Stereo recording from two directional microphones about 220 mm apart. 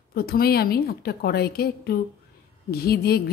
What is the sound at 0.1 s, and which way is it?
A woman's voice, 45° left (ahead or behind).